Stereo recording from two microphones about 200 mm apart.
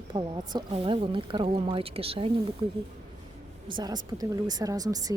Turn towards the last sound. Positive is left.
turn(degrees=-20)  # may be behind; listen again after turning